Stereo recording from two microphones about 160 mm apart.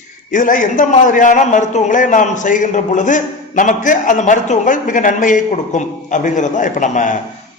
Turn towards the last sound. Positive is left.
turn(degrees=50)  # may be behind; listen again after turning